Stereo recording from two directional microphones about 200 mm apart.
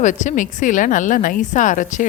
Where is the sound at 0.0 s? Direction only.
40° left (ahead or behind).